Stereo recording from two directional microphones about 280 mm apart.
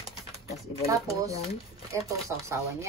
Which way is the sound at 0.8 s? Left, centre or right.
Centre.